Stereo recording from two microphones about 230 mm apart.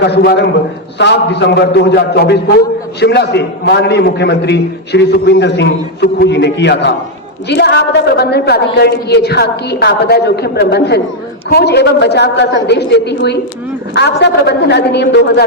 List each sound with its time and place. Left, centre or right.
0.0 s a man's voice: left